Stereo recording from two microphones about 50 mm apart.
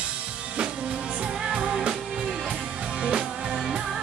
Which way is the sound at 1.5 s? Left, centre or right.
Centre.